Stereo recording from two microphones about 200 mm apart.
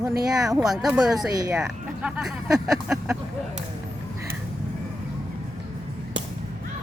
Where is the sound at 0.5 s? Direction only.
Centre (ahead or behind).